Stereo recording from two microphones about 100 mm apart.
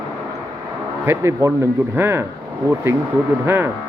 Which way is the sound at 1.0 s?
25° right (ahead or behind).